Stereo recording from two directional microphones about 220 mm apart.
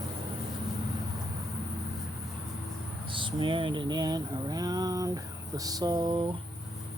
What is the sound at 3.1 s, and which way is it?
Speech, 20° right (ahead or behind).